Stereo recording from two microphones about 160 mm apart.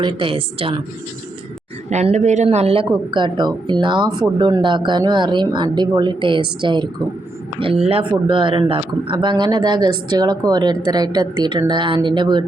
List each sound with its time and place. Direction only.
0.0 s a woman's voice: 30° right (ahead or behind)
1.9 s a man's voice: 45° right (ahead or behind)
3.1 s a woman's voice: 30° right (ahead or behind)